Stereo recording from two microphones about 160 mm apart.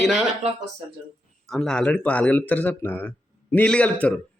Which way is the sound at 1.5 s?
5° left (ahead or behind).